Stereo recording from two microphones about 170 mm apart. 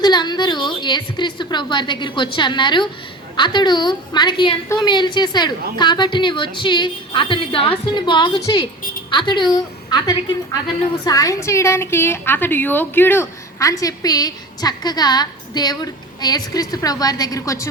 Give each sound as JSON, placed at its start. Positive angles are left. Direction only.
{"t": 0.0, "sound": "a woman's voice", "side_deg": 25}